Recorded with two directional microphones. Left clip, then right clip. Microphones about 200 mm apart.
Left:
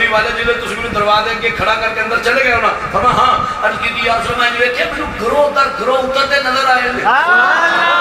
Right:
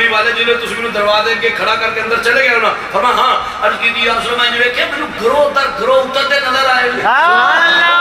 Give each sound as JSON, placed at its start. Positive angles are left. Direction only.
{"t": 7.1, "sound": "a man's voice", "side_deg": -45}